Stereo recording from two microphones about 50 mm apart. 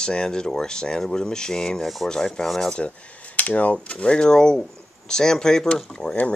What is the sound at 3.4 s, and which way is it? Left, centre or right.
Speech, left.